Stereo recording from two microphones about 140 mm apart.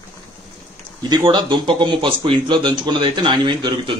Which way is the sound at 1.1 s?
35° right (ahead or behind).